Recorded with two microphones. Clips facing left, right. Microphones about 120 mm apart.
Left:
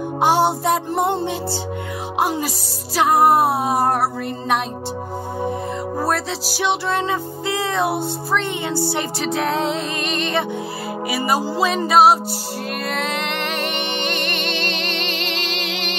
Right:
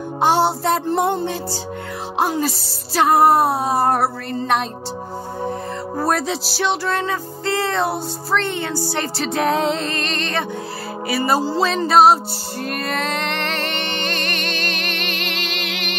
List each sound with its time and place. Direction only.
0.2 s music: 10° left (ahead or behind)
2.1 s music: 10° left (ahead or behind)
3.3 s music: 15° left (ahead or behind)
5.9 s music: 5° left (ahead or behind)
6.5 s music: 15° left (ahead or behind)
7.4 s music: 5° left (ahead or behind); by 16.0 s 30° left (ahead or behind)